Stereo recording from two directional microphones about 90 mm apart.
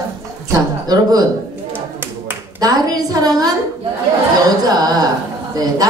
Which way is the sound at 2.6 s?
45° right (ahead or behind).